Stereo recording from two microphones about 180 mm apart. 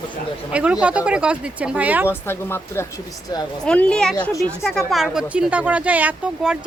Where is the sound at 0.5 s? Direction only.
5° right (ahead or behind).